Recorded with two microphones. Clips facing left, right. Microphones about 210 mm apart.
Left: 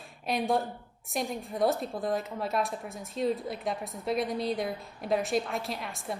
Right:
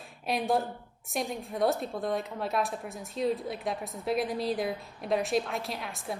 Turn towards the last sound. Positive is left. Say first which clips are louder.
# even
turn(degrees=0)  # may be behind; listen again after turning